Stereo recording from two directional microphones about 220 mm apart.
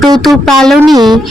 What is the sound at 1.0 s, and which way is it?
Speech, 20° right (ahead or behind).